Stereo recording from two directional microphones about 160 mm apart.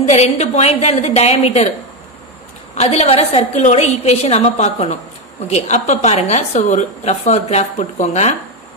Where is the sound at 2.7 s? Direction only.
40° left (ahead or behind).